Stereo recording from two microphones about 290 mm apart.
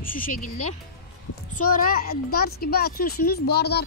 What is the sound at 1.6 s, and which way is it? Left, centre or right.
Speech, left.